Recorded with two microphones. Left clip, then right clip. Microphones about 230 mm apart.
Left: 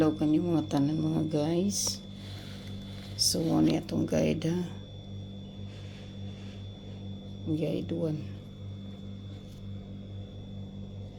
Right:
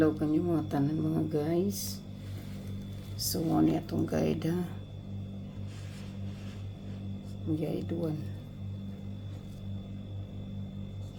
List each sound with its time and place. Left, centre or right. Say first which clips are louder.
0.0 s speech: left 1 dB; left
3.2 s speech: left 1 dB; left
7.6 s speech: left 5 dB; centre